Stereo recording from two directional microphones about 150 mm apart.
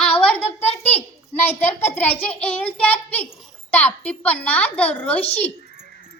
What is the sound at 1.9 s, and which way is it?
A child's voice, 10° left (ahead or behind).